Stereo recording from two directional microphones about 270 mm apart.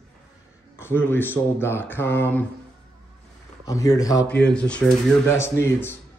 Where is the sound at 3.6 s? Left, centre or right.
Centre.